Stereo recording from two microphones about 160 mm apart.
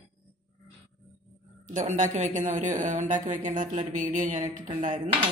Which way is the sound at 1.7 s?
50° right (ahead or behind).